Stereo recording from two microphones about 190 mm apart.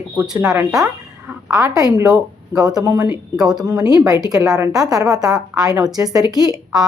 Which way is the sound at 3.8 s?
20° right (ahead or behind).